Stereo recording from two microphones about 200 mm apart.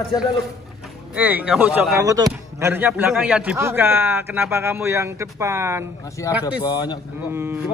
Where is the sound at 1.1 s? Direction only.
10° right (ahead or behind).